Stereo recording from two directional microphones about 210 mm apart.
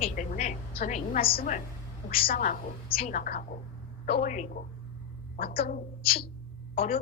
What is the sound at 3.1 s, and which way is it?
A woman's voice, 40° left (ahead or behind).